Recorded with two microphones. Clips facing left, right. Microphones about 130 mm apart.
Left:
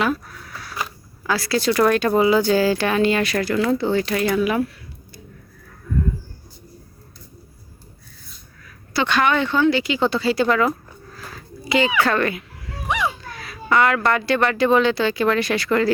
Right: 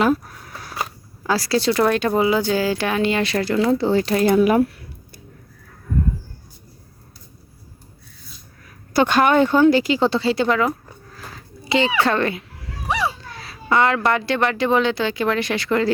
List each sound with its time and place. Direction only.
0.0 s speech: 40° right (ahead or behind)
0.8 s zipper: 30° right (ahead or behind)
2.0 s speech: 15° right (ahead or behind)
4.4 s speech: 40° right (ahead or behind)
8.9 s speech: 45° right (ahead or behind); by 10.7 s 20° right (ahead or behind)
11.7 s speech: 25° right (ahead or behind)
12.9 s a sound: 35° right (ahead or behind)
14.1 s speech: 20° right (ahead or behind)